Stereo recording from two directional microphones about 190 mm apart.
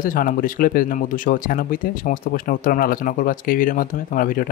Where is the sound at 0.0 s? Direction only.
45° left (ahead or behind).